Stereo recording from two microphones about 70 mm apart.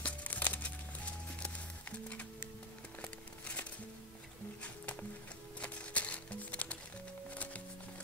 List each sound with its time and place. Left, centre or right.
0.0 s crumpling: left
1.4 s music: centre
5.6 s music: centre